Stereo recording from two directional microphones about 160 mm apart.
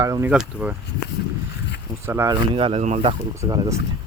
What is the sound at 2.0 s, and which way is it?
Speech, 15° right (ahead or behind).